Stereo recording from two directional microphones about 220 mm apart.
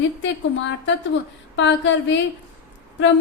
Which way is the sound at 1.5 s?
55° left (ahead or behind).